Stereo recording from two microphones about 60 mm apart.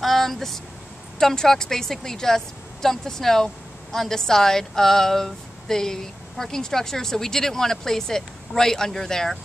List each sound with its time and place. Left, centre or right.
0.0 s vehicle: centre
1.2 s speech: centre